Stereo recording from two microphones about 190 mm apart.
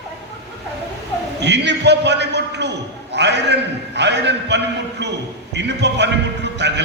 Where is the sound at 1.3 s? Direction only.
65° right (ahead or behind).